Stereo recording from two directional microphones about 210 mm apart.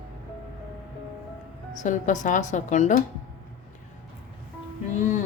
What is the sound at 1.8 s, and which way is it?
A woman's voice, 35° left (ahead or behind).